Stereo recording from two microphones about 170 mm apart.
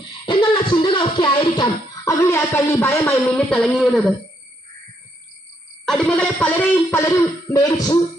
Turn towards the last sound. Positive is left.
turn(degrees=20)  # may be behind; listen again after turning